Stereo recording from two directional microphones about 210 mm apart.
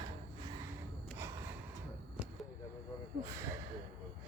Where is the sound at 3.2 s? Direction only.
15° right (ahead or behind).